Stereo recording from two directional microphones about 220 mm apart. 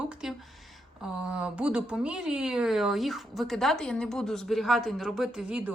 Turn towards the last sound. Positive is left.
turn(degrees=-5)  # may be behind; listen again after turning